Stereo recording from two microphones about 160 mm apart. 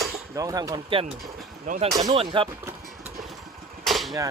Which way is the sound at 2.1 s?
35° right (ahead or behind).